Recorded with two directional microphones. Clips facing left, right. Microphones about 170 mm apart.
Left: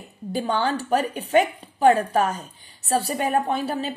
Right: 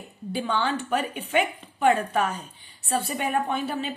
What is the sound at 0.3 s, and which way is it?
A woman's voice, 40° left (ahead or behind).